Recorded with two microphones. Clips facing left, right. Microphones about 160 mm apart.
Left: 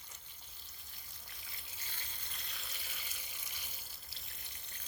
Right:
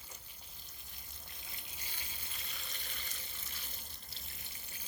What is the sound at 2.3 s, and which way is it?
Water, centre (ahead or behind).